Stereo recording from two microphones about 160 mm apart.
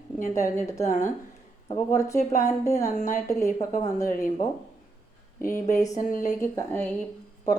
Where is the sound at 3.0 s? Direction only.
50° left (ahead or behind).